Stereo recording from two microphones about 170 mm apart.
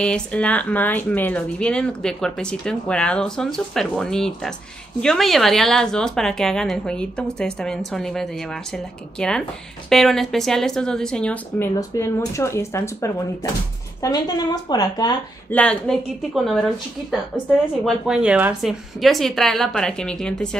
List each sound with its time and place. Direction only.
0.0 s speech: 5° left (ahead or behind)
11.9 s a woman's voice: 20° left (ahead or behind)
15.5 s speech: 5° left (ahead or behind)
17.8 s speech: 5° right (ahead or behind)